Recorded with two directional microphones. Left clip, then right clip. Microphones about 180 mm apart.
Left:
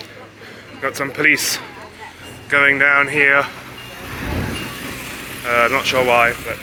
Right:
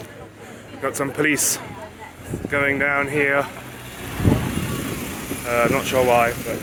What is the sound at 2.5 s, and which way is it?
Speech, 5° right (ahead or behind).